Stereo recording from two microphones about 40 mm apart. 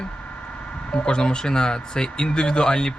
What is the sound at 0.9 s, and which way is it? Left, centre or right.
Speech, left.